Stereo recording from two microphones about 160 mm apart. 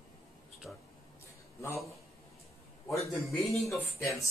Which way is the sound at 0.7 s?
Centre (ahead or behind).